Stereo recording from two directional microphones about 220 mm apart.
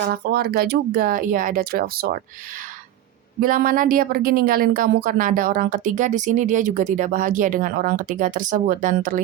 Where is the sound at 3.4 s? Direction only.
40° right (ahead or behind).